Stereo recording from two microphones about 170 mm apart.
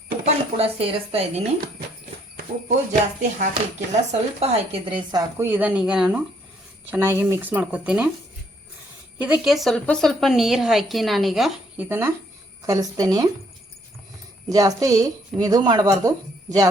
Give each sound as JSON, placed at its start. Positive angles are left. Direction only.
{"t": 0.3, "sound": "a woman's voice", "side_deg": -35}
{"t": 2.3, "sound": "speech", "side_deg": -50}
{"t": 5.1, "sound": "speech", "side_deg": -15}
{"t": 9.1, "sound": "speech", "side_deg": -5}
{"t": 11.9, "sound": "a woman's voice", "side_deg": -15}
{"t": 14.5, "sound": "a woman's voice", "side_deg": -20}